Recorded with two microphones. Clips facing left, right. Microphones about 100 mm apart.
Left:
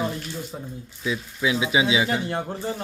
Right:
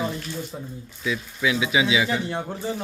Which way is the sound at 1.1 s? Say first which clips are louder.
Even; 25° left (ahead or behind).